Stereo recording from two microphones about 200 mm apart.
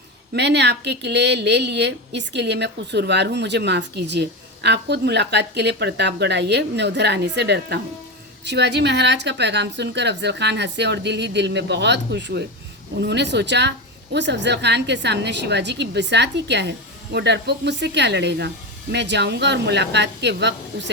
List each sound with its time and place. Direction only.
0.3 s a woman's voice: 60° right (ahead or behind)